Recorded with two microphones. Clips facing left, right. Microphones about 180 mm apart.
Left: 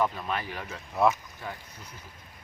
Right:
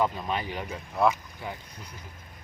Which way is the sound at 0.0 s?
15° right (ahead or behind).